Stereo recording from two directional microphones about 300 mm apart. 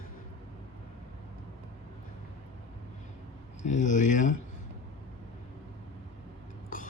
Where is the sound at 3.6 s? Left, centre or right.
Left.